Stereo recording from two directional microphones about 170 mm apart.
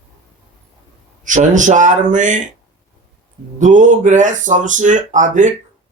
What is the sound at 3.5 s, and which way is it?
Speech, 45° right (ahead or behind).